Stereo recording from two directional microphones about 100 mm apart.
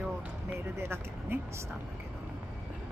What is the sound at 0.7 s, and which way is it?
Speech, 25° right (ahead or behind).